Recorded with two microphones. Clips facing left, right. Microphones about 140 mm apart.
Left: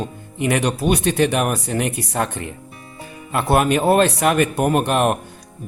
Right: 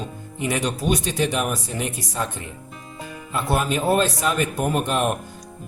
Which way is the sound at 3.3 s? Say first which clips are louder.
Left 6 dB; 65° left (ahead or behind).